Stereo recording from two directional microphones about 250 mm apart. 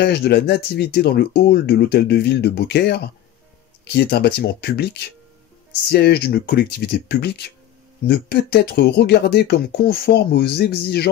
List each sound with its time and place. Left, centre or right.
0.0 s speech: left